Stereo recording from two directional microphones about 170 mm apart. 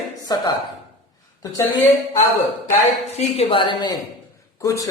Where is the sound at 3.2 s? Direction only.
35° left (ahead or behind).